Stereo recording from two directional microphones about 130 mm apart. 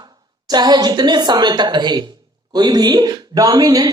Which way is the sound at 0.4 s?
30° right (ahead or behind).